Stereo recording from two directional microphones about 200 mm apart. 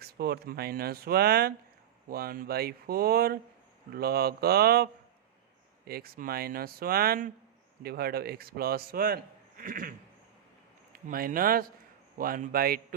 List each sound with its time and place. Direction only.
0.0 s a man's voice: 50° right (ahead or behind)
10.9 s a man's voice: 45° right (ahead or behind)